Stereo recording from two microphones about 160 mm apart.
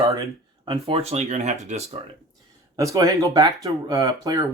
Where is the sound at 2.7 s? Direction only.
20° right (ahead or behind).